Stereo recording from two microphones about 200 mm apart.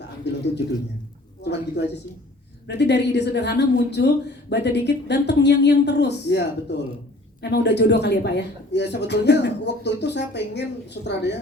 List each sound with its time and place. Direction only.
1.4 s a woman's voice: 60° left (ahead or behind)